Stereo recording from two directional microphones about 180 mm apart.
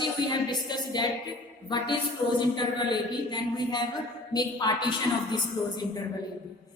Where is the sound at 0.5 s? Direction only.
25° left (ahead or behind).